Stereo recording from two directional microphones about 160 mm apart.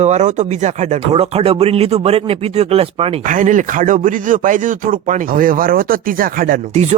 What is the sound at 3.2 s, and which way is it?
Speech, 55° right (ahead or behind).